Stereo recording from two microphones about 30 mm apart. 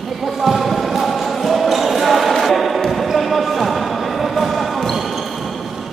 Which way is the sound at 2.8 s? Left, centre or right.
Centre.